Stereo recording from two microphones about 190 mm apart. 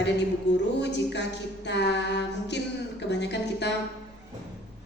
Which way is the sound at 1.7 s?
65° left (ahead or behind).